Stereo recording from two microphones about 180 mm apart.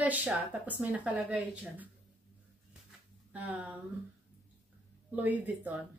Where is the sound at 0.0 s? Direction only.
10° right (ahead or behind).